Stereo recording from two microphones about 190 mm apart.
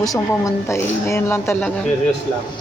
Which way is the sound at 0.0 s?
15° left (ahead or behind).